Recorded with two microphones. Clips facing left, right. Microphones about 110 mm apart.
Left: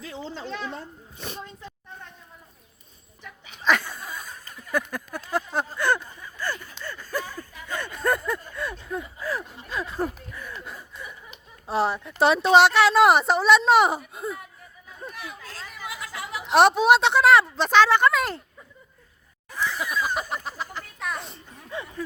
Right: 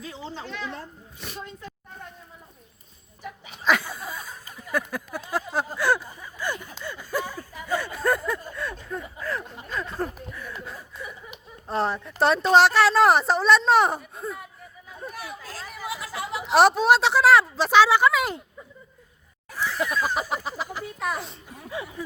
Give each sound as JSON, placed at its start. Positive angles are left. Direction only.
{"t": 3.6, "sound": "a sound", "side_deg": -5}
{"t": 10.2, "sound": "chuckle", "side_deg": 0}
{"t": 11.6, "sound": "speech", "side_deg": 5}
{"t": 15.9, "sound": "chatter", "side_deg": -30}
{"t": 16.4, "sound": "speech", "side_deg": 0}
{"t": 19.5, "sound": "a sound", "side_deg": -5}
{"t": 21.7, "sound": "speech", "side_deg": -10}